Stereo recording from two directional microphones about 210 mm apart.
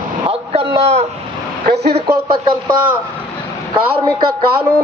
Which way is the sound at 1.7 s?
50° right (ahead or behind).